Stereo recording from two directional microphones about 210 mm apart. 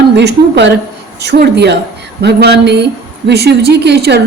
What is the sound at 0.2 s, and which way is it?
A woman's voice, 55° right (ahead or behind).